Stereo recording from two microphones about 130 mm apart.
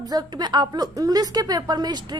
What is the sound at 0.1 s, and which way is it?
A woman's voice, 30° right (ahead or behind).